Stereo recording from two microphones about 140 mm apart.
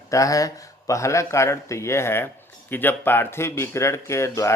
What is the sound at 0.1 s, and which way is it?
Speech, 25° left (ahead or behind).